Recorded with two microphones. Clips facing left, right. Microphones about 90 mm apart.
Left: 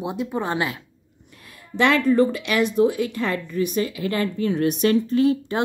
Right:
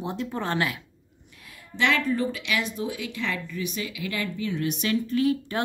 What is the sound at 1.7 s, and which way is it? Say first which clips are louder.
A woman's voice: left 7 dB; 55° left (ahead or behind).